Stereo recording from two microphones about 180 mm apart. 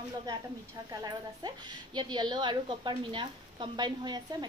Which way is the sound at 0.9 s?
20° right (ahead or behind).